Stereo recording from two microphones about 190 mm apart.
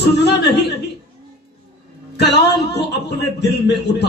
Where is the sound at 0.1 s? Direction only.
60° left (ahead or behind).